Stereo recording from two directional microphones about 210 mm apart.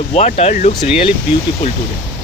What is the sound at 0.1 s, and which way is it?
Speech, 30° left (ahead or behind).